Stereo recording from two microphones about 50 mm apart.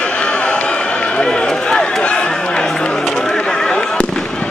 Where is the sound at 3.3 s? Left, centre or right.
Centre.